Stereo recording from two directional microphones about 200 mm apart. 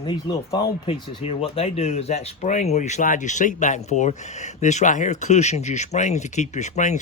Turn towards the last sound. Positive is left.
turn(degrees=35)  # may be behind; listen again after turning